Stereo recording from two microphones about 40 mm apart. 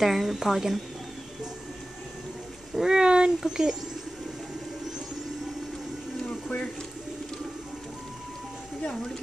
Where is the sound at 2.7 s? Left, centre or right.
Centre.